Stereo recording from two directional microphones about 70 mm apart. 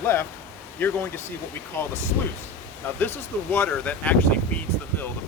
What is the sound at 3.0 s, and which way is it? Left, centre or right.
Speech, left.